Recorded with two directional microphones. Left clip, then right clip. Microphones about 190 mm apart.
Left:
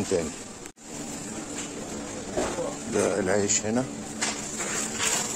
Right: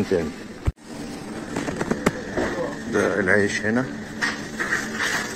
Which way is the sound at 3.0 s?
25° left (ahead or behind).